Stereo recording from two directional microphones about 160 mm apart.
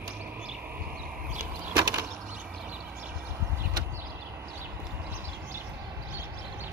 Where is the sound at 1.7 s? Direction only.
25° right (ahead or behind).